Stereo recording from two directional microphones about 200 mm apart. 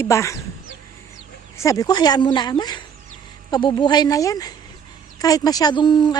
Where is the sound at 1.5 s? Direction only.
15° left (ahead or behind).